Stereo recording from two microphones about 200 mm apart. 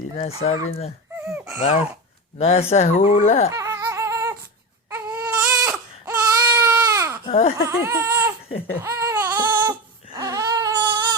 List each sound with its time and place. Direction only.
0.2 s speech: 30° left (ahead or behind)
1.2 s a sound: 10° right (ahead or behind)
1.6 s speech: 30° left (ahead or behind)
3.5 s a sound: 15° right (ahead or behind)
4.9 s baby cry: 10° right (ahead or behind)
7.3 s speech: 30° left (ahead or behind)
7.9 s baby cry: 15° right (ahead or behind)